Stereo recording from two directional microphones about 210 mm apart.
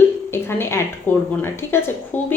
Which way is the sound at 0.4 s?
10° left (ahead or behind).